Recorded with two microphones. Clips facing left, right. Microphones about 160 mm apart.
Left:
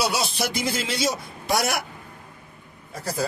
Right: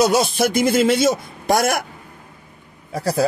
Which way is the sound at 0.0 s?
50° right (ahead or behind).